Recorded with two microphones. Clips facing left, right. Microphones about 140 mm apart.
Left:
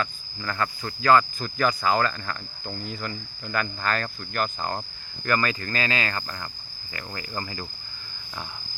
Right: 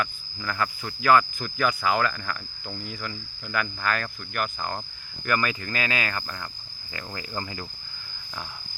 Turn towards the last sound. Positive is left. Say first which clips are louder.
# even
turn(degrees=-5)  # may be behind; listen again after turning